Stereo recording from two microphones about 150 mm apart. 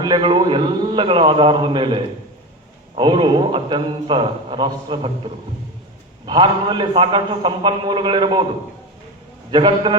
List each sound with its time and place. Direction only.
0.0 s a man's voice: 30° right (ahead or behind)
9.5 s a man's voice: 35° right (ahead or behind)